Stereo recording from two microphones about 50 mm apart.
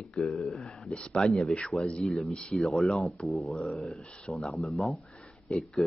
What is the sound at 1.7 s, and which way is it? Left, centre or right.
Speech, centre.